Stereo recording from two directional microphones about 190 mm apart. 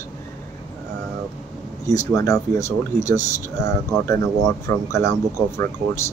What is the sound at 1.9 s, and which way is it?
Speech, 15° left (ahead or behind).